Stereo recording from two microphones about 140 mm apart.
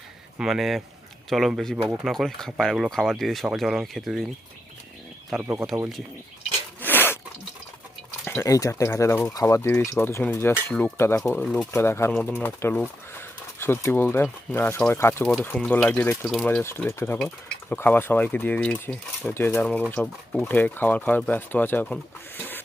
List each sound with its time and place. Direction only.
0.3 s speech: centre (ahead or behind)
5.4 s speech: 15° right (ahead or behind)
6.8 s a sound: 15° left (ahead or behind)
8.4 s speech: 25° left (ahead or behind)
15.3 s speech: 5° left (ahead or behind)
16.6 s speech: 20° left (ahead or behind)
22.4 s a sound: 15° left (ahead or behind)